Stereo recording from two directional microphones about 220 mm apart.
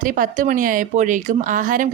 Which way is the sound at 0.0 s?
40° right (ahead or behind).